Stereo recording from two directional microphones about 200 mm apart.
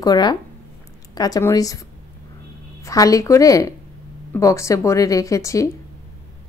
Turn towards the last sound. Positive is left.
turn(degrees=15)  # may be behind; listen again after turning